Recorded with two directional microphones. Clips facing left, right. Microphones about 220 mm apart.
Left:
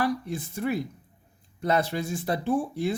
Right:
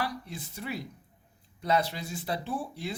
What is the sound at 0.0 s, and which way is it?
Speech, 50° left (ahead or behind).